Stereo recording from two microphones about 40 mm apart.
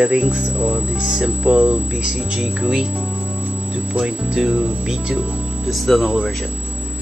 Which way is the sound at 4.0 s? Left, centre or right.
Centre.